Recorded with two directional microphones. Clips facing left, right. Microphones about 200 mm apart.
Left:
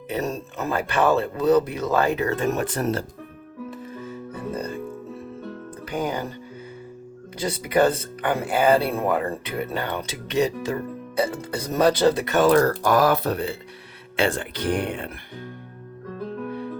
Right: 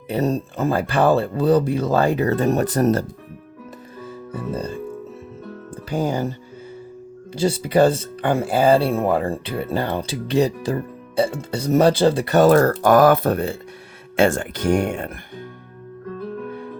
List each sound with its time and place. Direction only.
0.1 s speech: 30° right (ahead or behind)
4.3 s speech: 30° right (ahead or behind)
5.9 s speech: 30° right (ahead or behind)
7.3 s speech: 30° right (ahead or behind); by 15.1 s 45° right (ahead or behind)